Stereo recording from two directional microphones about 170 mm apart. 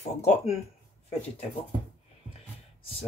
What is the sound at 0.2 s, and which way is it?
Speech, 40° left (ahead or behind).